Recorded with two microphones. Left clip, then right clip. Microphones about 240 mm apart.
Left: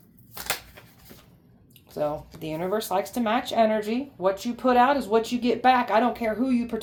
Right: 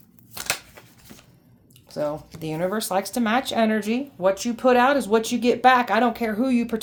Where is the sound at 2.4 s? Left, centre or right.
Right.